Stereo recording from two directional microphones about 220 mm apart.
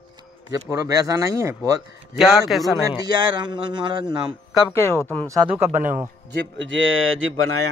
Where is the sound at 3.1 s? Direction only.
20° right (ahead or behind).